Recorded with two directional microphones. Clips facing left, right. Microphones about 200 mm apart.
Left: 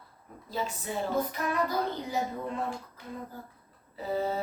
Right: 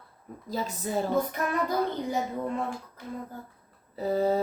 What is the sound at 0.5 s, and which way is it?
Speech, 40° right (ahead or behind).